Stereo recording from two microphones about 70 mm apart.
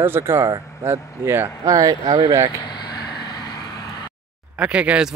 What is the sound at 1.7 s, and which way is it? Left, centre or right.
Speech, right.